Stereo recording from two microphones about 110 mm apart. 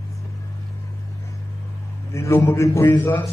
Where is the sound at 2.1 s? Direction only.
20° left (ahead or behind).